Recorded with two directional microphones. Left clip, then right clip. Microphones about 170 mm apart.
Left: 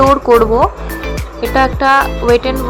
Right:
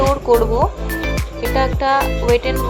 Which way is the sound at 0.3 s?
25° left (ahead or behind).